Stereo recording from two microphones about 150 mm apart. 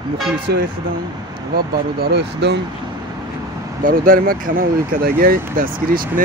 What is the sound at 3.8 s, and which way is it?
Speech, 70° right (ahead or behind).